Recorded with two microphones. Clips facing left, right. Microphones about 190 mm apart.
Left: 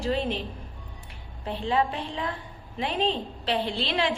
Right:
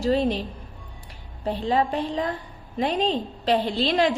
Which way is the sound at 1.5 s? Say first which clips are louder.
Right 3 dB; 40° right (ahead or behind).